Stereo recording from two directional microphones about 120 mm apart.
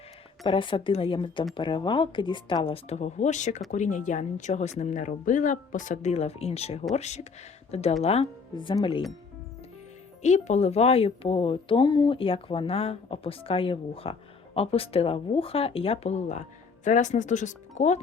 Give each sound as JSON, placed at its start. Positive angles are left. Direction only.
{"t": 0.4, "sound": "speech", "side_deg": 45}
{"t": 4.8, "sound": "speech", "side_deg": 90}
{"t": 10.2, "sound": "speech", "side_deg": 75}
{"t": 11.5, "sound": "speech", "side_deg": 40}
{"t": 16.8, "sound": "speech", "side_deg": 90}